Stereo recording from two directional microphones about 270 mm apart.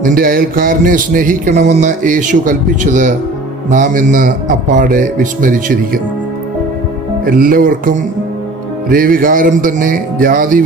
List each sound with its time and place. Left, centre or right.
0.0 s music: right
7.3 s speech: right